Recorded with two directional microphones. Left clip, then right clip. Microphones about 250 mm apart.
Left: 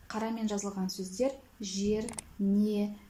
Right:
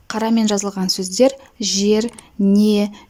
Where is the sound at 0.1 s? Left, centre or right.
Right.